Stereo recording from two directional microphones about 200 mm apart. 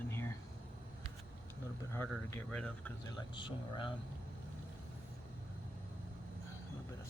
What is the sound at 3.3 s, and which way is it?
Speech, 25° left (ahead or behind).